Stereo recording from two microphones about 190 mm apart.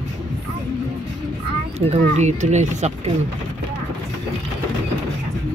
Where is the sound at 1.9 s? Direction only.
35° right (ahead or behind).